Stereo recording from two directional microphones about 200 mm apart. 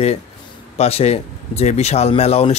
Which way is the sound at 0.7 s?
30° left (ahead or behind).